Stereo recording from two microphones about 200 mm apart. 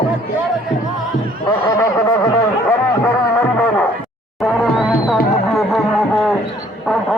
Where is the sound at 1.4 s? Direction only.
15° left (ahead or behind).